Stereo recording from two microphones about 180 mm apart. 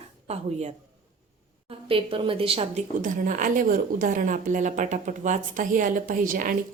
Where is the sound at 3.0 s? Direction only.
50° right (ahead or behind).